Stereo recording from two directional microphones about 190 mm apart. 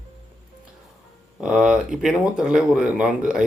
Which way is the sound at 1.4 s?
5° right (ahead or behind).